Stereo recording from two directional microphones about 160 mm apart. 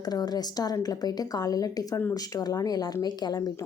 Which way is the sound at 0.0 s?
25° left (ahead or behind).